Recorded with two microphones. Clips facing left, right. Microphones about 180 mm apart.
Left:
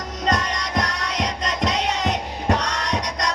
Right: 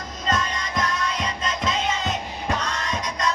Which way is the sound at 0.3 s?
75° left (ahead or behind).